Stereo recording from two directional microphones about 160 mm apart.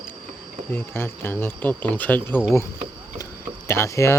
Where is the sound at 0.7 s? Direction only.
15° left (ahead or behind).